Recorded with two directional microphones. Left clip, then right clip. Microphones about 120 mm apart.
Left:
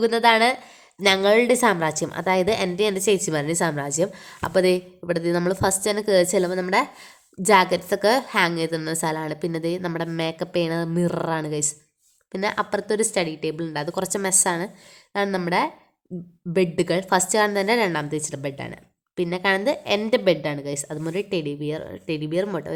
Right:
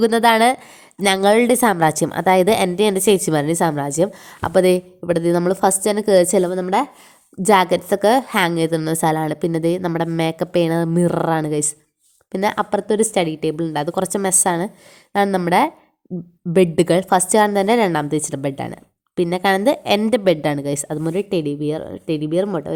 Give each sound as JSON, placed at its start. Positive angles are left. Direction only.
{"t": 0.0, "sound": "a woman's voice", "side_deg": -45}
{"t": 6.5, "sound": "a woman's voice", "side_deg": -15}
{"t": 7.4, "sound": "a woman's voice", "side_deg": -30}